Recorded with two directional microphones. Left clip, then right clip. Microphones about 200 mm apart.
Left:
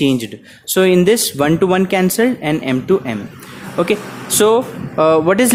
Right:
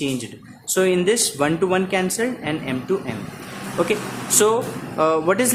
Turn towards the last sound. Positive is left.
turn(degrees=40)  # may be behind; listen again after turning